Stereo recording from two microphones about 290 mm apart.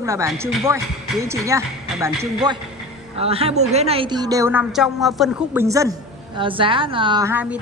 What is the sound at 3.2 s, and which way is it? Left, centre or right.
A woman's voice, centre.